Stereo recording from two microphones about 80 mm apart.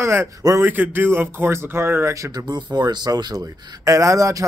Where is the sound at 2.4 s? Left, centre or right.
Right.